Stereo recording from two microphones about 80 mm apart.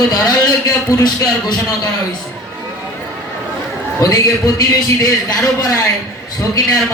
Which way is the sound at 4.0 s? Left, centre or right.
Left.